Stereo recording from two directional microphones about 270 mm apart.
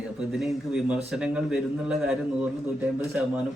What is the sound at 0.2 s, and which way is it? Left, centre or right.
A man's voice, centre.